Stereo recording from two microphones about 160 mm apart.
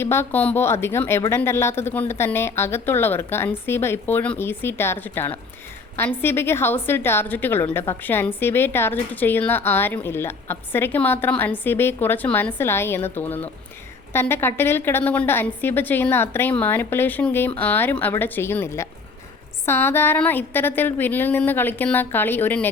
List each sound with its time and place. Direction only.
0.0 s a woman's voice: 15° left (ahead or behind)